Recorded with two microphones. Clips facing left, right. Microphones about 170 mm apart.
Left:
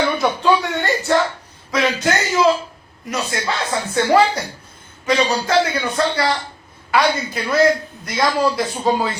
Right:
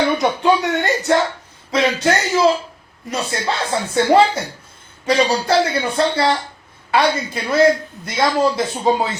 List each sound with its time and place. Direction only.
0.2 s a man's voice: 20° right (ahead or behind)
1.7 s a man's voice: 30° right (ahead or behind)